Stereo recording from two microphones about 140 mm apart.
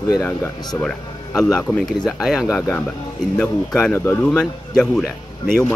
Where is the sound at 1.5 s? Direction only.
5° left (ahead or behind).